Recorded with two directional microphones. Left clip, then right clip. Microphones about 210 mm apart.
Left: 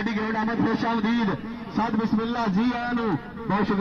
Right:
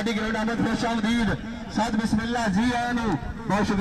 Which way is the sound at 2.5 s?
20° right (ahead or behind).